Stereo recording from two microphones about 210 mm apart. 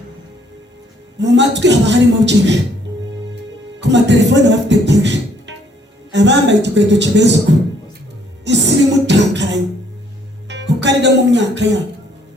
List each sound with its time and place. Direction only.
1.2 s a woman's voice: 55° right (ahead or behind)
3.8 s a woman's voice: 55° right (ahead or behind)
8.4 s music: 55° right (ahead or behind)
10.5 s speech: 55° right (ahead or behind)